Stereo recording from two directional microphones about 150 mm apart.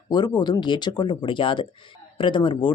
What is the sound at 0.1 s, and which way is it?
Speech, 30° left (ahead or behind).